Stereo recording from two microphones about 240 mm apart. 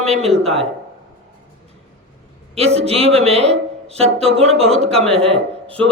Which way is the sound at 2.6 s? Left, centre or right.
Right.